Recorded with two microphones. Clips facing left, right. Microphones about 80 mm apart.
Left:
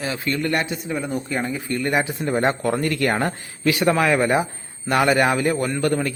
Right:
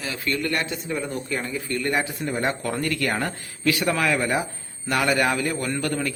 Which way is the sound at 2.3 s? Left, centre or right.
Left.